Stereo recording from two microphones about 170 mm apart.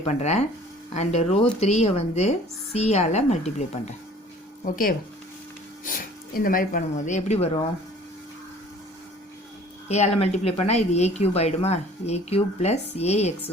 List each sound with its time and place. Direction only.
0.0 s speech: 40° left (ahead or behind)
4.6 s speech: 55° left (ahead or behind); by 7.6 s 40° left (ahead or behind)
9.9 s speech: 40° left (ahead or behind)